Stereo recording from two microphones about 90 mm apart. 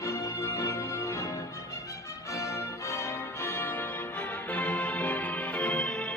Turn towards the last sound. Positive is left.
turn(degrees=10)  # may be behind; listen again after turning